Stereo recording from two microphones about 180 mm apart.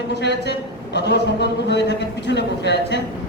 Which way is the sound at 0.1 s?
70° left (ahead or behind).